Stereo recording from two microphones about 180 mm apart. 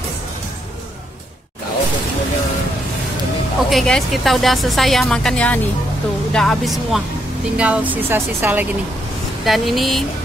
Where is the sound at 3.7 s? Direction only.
Centre (ahead or behind).